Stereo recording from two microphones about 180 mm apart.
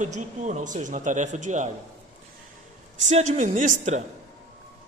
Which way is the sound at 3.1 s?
40° right (ahead or behind).